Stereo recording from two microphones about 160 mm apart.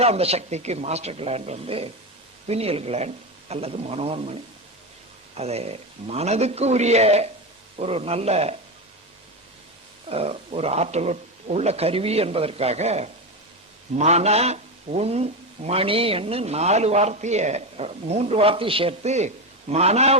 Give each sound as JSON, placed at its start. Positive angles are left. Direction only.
{"t": 0.0, "sound": "a man's voice", "side_deg": -40}
{"t": 5.4, "sound": "a man's voice", "side_deg": -40}
{"t": 10.1, "sound": "a man's voice", "side_deg": -40}